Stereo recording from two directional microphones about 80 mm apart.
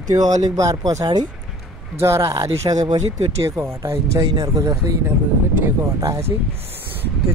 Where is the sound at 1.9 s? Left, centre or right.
Right.